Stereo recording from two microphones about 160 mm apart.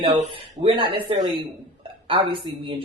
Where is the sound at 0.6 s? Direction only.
30° right (ahead or behind).